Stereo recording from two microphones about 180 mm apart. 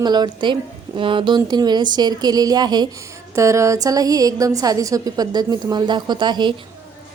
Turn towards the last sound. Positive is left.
turn(degrees=-25)  # may be behind; listen again after turning